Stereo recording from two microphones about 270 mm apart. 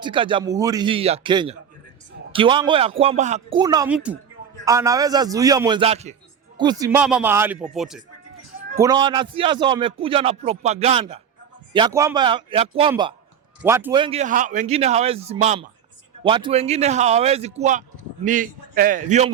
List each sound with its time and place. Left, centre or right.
0.0 s a man's voice: centre
8.8 s a man's voice: centre